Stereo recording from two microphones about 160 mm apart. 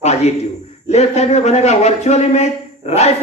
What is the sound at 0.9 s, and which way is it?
A woman's voice, 45° left (ahead or behind).